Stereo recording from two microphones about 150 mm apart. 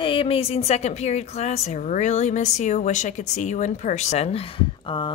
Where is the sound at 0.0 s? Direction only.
35° left (ahead or behind).